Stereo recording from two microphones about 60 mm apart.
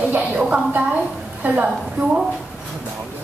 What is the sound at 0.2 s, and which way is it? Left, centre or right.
A woman's voice, centre.